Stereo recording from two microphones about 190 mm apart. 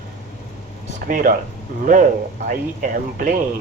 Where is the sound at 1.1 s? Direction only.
45° right (ahead or behind).